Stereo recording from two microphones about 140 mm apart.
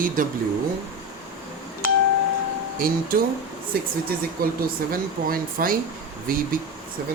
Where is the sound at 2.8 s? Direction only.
90° right.